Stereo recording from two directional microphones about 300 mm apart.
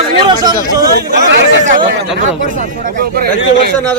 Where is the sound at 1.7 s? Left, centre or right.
Right.